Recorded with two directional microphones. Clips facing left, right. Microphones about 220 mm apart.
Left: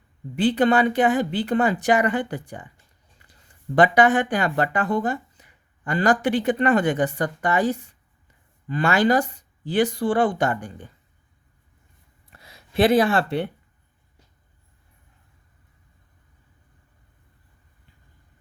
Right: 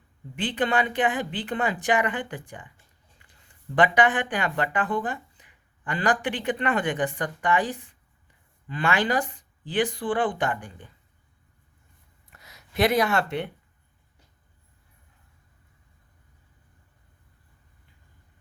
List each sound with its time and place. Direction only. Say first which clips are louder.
0.3 s speech: left 7 dB; 40° left (ahead or behind)
3.2 s a sound: left 6 dB; 40° left (ahead or behind)
3.8 s speech: left 4 dB; 40° left (ahead or behind)
12.3 s speech: left 4 dB; 30° left (ahead or behind)